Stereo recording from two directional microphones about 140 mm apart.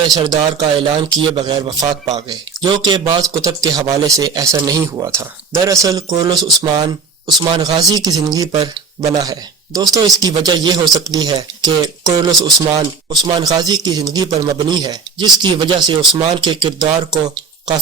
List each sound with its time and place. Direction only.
0.0 s speech: 25° right (ahead or behind)